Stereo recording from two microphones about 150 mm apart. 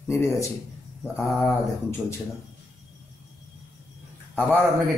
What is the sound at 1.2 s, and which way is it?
Mantra, centre (ahead or behind).